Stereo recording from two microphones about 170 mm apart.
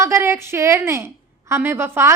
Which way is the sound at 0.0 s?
15° right (ahead or behind).